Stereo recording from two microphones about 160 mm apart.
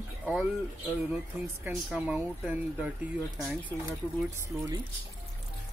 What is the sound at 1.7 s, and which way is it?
Speech, centre (ahead or behind).